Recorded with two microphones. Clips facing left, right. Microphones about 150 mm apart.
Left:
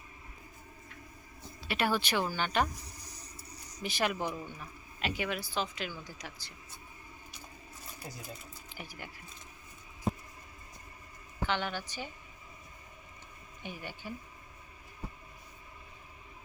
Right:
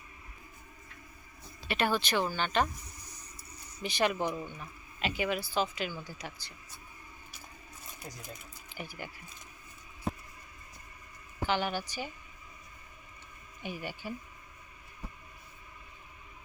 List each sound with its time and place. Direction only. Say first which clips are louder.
1.6 s speech: right 1 dB; 5° left (ahead or behind)
2.8 s a sound: left 1 dB; 35° left (ahead or behind)
3.8 s a woman's voice: right 3 dB; centre (ahead or behind)
8.3 s speech: left 1 dB; centre (ahead or behind)
10.1 s a sound: left 2 dB; centre (ahead or behind)
11.3 s a woman's voice: right 3 dB; 5° right (ahead or behind)
13.6 s speech: right 4 dB; 10° right (ahead or behind)